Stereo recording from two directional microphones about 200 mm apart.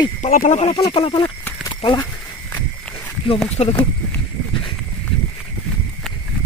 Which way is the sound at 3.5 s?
30° left (ahead or behind).